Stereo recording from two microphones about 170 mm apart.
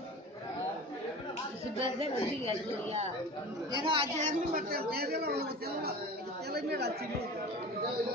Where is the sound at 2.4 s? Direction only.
35° right (ahead or behind).